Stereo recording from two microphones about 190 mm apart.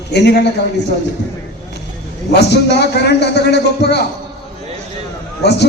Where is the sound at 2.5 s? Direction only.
60° left (ahead or behind).